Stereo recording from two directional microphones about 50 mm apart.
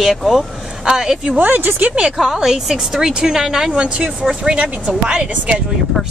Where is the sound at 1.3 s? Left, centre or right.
Right.